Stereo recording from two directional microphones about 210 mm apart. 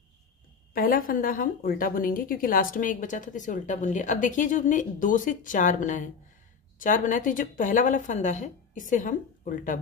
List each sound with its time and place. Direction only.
0.7 s a woman's voice: 45° left (ahead or behind)